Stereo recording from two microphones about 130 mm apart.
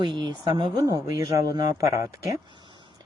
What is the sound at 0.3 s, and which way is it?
Speech, 35° right (ahead or behind).